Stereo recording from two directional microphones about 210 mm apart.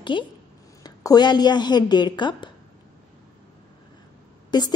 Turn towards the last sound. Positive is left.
turn(degrees=20)  # may be behind; listen again after turning